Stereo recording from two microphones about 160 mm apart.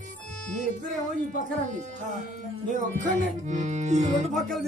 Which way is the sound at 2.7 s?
50° right (ahead or behind).